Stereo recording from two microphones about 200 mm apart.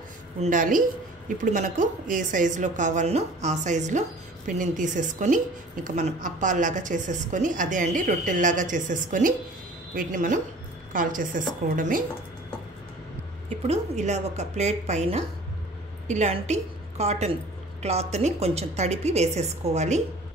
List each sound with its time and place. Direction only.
0.4 s a woman's voice: 40° right (ahead or behind)
13.7 s a woman's voice: 35° right (ahead or behind)